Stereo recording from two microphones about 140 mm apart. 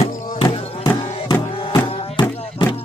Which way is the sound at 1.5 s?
40° left (ahead or behind).